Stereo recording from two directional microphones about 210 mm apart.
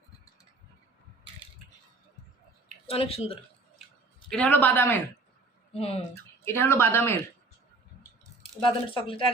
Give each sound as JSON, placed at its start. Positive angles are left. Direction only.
{"t": 2.8, "sound": "speech", "side_deg": 25}
{"t": 4.3, "sound": "speech", "side_deg": 5}
{"t": 5.7, "sound": "speech", "side_deg": 30}
{"t": 6.4, "sound": "speech", "side_deg": 10}
{"t": 8.6, "sound": "speech", "side_deg": 25}